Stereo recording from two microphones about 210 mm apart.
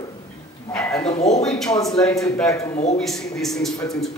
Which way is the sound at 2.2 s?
15° left (ahead or behind).